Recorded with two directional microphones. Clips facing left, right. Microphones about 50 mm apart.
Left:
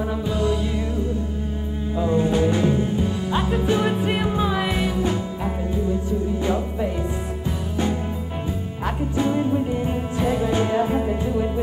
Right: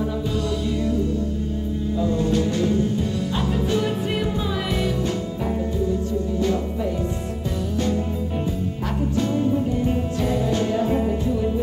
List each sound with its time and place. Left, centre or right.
2.0 s music: left
7.7 s music: centre
9.1 s music: centre